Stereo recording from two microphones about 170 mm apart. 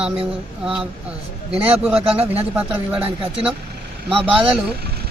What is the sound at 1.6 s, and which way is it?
Speech, 10° right (ahead or behind).